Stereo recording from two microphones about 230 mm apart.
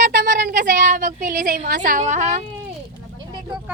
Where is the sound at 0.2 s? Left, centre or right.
Right.